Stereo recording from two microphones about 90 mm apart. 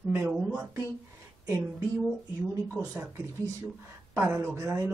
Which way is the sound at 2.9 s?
35° right (ahead or behind).